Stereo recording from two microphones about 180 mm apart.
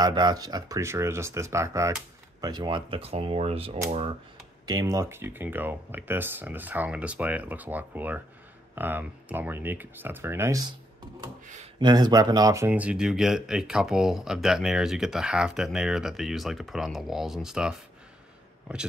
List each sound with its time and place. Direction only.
0.0 s speech: 25° right (ahead or behind)
4.6 s speech: 20° right (ahead or behind)
11.4 s speech: 40° right (ahead or behind)
11.8 s speech: 20° right (ahead or behind); by 17.8 s 5° right (ahead or behind)